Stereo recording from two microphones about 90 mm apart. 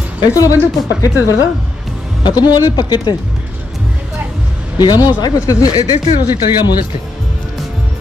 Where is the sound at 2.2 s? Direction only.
50° left (ahead or behind).